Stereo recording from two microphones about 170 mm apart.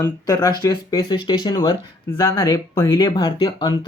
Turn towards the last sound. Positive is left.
turn(degrees=25)  # may be behind; listen again after turning